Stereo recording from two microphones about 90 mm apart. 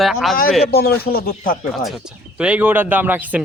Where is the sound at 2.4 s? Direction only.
15° right (ahead or behind).